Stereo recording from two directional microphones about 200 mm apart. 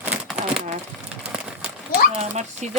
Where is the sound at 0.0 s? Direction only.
5° right (ahead or behind).